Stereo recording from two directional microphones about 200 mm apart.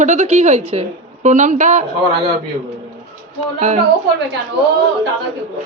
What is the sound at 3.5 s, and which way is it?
Speech, 35° right (ahead or behind).